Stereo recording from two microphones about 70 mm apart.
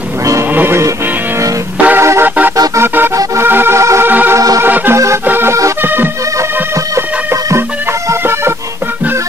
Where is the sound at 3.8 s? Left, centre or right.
Right.